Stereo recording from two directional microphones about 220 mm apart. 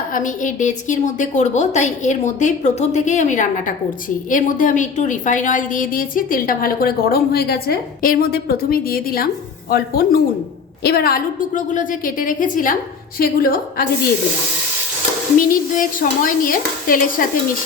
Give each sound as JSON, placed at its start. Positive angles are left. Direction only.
{"t": 0.1, "sound": "a woman's voice", "side_deg": 35}
{"t": 15.4, "sound": "a woman's voice", "side_deg": 40}